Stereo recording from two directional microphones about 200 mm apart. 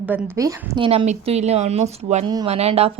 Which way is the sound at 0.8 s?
30° right (ahead or behind).